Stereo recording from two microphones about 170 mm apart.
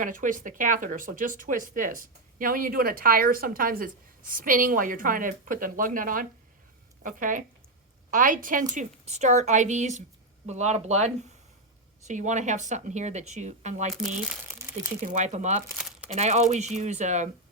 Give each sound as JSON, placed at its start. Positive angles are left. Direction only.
{"t": 0.0, "sound": "speech", "side_deg": -50}
{"t": 14.2, "sound": "crumpling", "side_deg": -5}
{"t": 15.0, "sound": "speech", "side_deg": -45}
{"t": 15.7, "sound": "crumpling", "side_deg": -5}
{"t": 16.1, "sound": "speech", "side_deg": -40}